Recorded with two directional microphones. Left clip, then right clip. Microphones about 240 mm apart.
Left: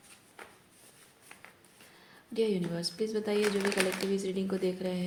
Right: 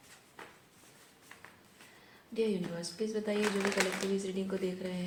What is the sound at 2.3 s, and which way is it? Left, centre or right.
A woman's voice, left.